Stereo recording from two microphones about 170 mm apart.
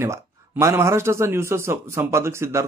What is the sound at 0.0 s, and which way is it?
A man's voice, 15° right (ahead or behind).